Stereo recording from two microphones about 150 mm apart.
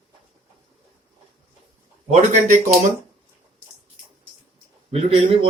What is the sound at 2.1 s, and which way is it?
Speech, 55° right (ahead or behind).